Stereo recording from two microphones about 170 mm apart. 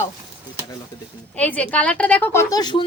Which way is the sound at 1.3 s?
10° left (ahead or behind).